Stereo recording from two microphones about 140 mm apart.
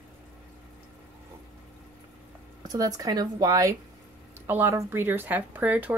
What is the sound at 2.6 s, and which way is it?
A woman's voice, 25° right (ahead or behind).